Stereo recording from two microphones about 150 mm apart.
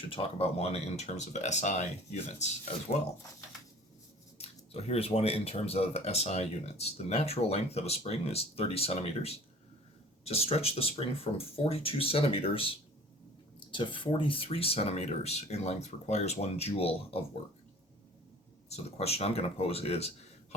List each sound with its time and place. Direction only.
0.1 s speech: 40° left (ahead or behind)
4.4 s speech: 40° left (ahead or behind)
18.7 s speech: 45° left (ahead or behind)